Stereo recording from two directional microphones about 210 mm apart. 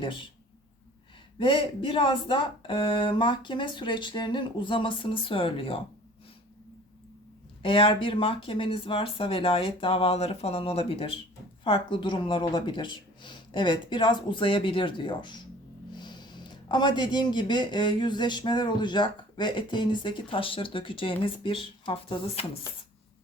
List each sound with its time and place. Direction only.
0.0 s speech: 25° left (ahead or behind)
1.4 s speech: 25° left (ahead or behind)
7.6 s speech: 25° left (ahead or behind)